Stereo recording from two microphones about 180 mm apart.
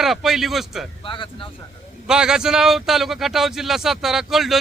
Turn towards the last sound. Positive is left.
turn(degrees=0)  # may be behind; listen again after turning